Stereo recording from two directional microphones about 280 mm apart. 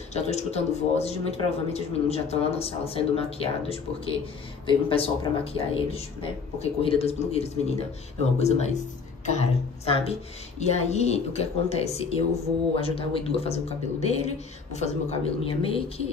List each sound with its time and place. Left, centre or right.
0.1 s speech: left